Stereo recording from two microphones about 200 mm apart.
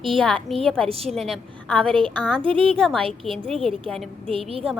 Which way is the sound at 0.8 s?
30° right (ahead or behind).